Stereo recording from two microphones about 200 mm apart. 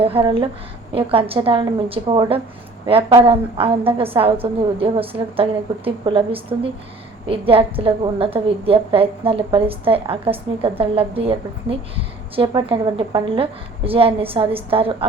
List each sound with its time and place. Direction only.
0.0 s a woman's voice: 30° right (ahead or behind)